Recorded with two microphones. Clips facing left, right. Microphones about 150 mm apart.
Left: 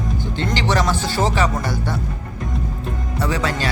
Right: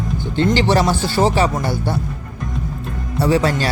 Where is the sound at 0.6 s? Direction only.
30° right (ahead or behind).